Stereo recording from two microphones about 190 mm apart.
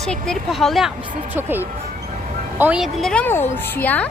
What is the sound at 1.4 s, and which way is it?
A woman's voice, 10° right (ahead or behind).